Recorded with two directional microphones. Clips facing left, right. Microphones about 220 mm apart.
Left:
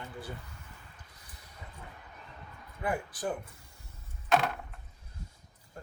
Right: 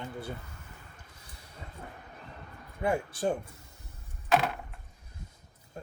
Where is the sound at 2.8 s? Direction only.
25° right (ahead or behind).